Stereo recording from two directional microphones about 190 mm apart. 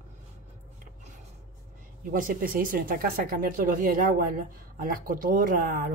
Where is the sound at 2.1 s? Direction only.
45° right (ahead or behind).